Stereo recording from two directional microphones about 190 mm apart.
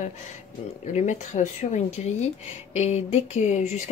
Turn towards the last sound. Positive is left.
turn(degrees=40)  # may be behind; listen again after turning